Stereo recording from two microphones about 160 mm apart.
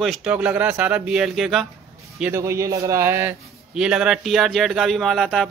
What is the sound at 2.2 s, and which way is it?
A man's voice, 15° right (ahead or behind).